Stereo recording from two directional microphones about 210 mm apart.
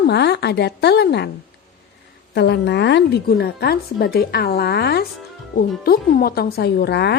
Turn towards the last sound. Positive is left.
turn(degrees=50)  # may be behind; listen again after turning